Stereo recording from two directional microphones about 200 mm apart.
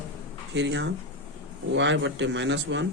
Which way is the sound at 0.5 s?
60° right (ahead or behind).